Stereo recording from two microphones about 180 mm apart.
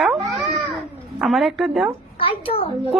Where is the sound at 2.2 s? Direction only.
30° left (ahead or behind).